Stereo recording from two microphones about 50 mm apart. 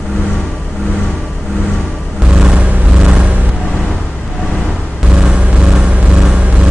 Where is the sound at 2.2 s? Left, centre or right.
Centre.